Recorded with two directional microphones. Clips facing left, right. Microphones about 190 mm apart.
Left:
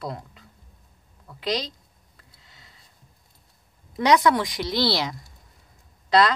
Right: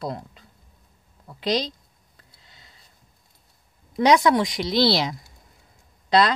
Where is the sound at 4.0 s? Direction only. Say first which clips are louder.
Right 2 dB; 15° right (ahead or behind).